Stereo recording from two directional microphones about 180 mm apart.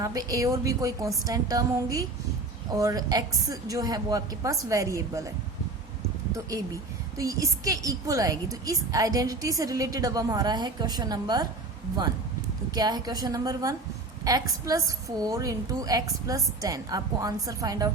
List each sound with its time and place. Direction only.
0.0 s a woman's voice: 20° right (ahead or behind)
6.3 s a woman's voice: 20° right (ahead or behind)
12.7 s a woman's voice: 20° right (ahead or behind)